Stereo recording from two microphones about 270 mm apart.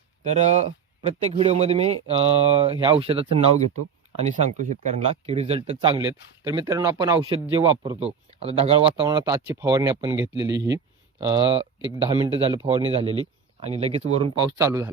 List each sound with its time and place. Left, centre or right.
0.3 s speech: right